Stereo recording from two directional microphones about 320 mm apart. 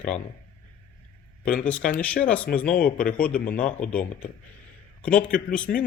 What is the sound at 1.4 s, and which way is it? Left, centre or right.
Speech, centre.